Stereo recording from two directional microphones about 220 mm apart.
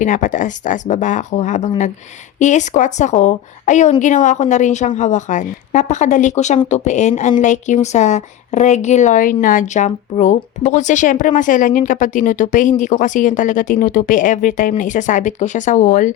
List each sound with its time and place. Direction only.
0.0 s a woman's voice: 35° left (ahead or behind)